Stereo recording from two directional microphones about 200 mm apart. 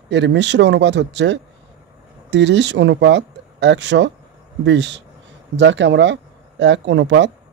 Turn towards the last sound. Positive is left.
turn(degrees=-60)  # may be behind; listen again after turning